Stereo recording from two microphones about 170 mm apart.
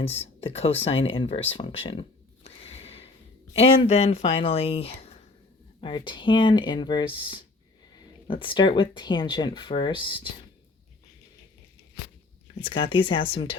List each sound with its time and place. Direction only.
0.0 s speech: 35° left (ahead or behind)
2.6 s a sound: 35° left (ahead or behind)
3.5 s speech: 35° left (ahead or behind)
12.5 s speech: 30° left (ahead or behind)